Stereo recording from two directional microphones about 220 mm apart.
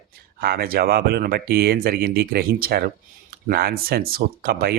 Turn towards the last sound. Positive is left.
turn(degrees=-45)  # may be behind; listen again after turning